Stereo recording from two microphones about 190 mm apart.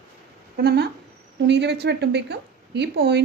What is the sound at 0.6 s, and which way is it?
A woman's voice, 60° right (ahead or behind).